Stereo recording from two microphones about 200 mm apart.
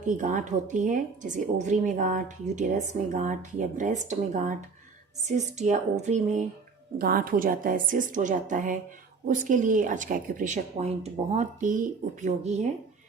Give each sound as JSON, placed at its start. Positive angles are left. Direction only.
{"t": 0.0, "sound": "speech", "side_deg": -40}
{"t": 7.0, "sound": "a woman's voice", "side_deg": -45}